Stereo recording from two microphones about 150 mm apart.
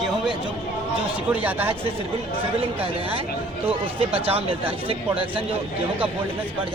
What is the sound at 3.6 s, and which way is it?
Speech, 40° right (ahead or behind).